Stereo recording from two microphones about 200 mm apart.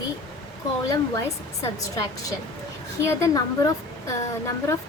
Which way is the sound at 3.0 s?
15° left (ahead or behind).